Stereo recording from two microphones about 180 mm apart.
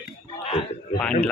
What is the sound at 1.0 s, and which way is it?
Speech, 10° left (ahead or behind).